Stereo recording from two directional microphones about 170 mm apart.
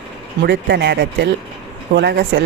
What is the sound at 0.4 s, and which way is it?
Speech, 80° right.